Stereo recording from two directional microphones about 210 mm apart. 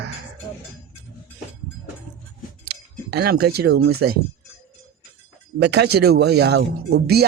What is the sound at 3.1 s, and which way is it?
Speech, 50° right (ahead or behind).